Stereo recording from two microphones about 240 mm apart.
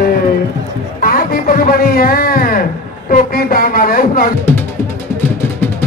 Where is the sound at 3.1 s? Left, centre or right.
Left.